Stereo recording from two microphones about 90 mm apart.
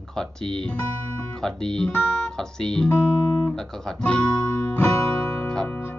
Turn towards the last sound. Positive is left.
turn(degrees=20)  # may be behind; listen again after turning